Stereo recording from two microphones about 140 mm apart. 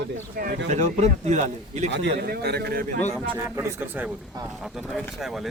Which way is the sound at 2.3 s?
90° right.